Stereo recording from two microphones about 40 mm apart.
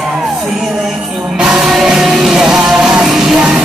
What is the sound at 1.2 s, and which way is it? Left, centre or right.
Music, centre.